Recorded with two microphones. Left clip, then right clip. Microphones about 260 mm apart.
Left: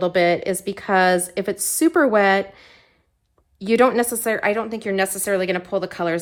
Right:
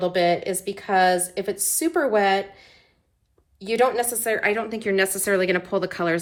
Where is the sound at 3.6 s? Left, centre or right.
Left.